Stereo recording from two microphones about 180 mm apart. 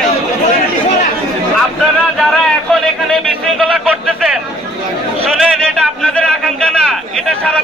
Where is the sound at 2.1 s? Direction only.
Centre (ahead or behind).